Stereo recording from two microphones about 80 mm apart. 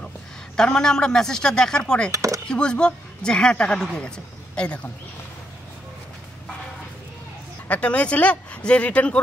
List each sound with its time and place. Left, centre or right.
0.6 s a woman's voice: centre
2.0 s speech: right
2.4 s a woman's voice: centre
7.6 s a woman's voice: centre